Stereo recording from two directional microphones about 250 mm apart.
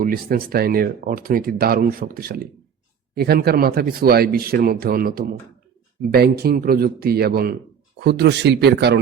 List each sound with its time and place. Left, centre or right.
0.0 s speech: right